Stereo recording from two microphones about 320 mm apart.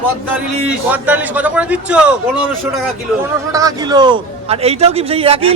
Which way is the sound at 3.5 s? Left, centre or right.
Centre.